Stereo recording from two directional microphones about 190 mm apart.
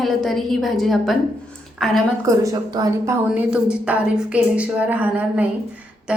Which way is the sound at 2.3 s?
20° right (ahead or behind).